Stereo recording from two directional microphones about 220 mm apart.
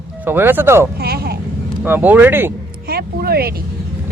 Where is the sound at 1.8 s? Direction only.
10° right (ahead or behind).